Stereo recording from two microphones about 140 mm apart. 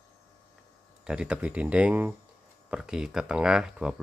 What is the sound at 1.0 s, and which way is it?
Speech, 5° right (ahead or behind).